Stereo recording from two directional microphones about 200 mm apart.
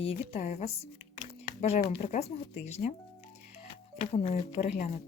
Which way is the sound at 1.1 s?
35° left (ahead or behind).